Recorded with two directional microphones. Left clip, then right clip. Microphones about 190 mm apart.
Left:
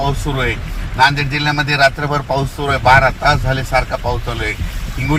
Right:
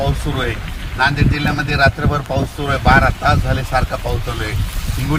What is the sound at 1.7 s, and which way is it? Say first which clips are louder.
Speech: left 1 dB; 35° left (ahead or behind).